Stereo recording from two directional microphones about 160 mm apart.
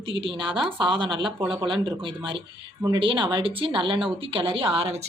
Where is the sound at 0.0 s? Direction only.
35° right (ahead or behind).